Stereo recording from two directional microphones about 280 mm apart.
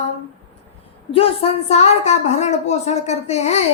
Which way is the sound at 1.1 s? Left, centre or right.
Left.